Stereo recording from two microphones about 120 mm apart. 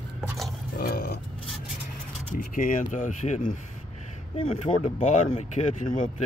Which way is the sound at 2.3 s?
90° left.